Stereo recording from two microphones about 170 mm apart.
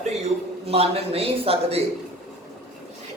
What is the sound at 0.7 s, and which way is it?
A man's voice, 35° right (ahead or behind).